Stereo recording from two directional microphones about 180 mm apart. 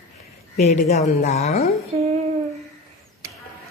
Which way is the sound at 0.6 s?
40° left (ahead or behind).